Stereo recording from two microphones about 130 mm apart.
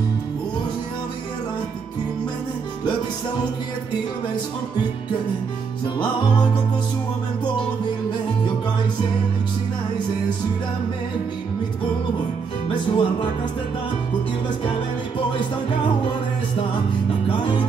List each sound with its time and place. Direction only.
12.6 s music: 40° left (ahead or behind)
17.3 s music: 40° left (ahead or behind)